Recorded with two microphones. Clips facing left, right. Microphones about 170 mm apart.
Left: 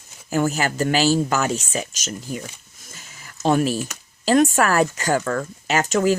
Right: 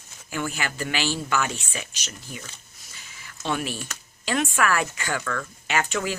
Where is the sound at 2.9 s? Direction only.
45° left (ahead or behind).